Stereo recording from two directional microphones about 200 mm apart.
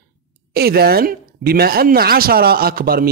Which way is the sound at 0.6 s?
50° right (ahead or behind).